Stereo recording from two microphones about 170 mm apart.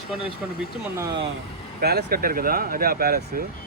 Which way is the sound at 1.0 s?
25° right (ahead or behind).